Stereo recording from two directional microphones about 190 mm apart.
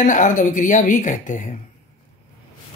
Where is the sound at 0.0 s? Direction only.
40° left (ahead or behind).